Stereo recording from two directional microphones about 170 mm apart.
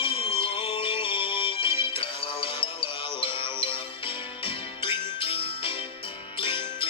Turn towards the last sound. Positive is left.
turn(degrees=30)  # may be behind; listen again after turning